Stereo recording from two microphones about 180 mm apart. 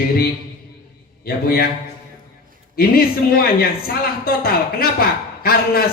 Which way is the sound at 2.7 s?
55° left (ahead or behind).